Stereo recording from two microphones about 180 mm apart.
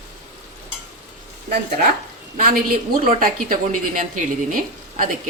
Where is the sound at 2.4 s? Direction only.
50° right (ahead or behind).